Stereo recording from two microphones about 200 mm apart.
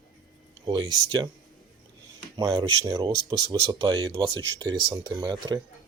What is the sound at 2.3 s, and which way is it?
Speech, 20° right (ahead or behind).